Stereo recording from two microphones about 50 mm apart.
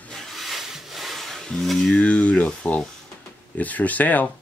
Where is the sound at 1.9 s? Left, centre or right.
Left.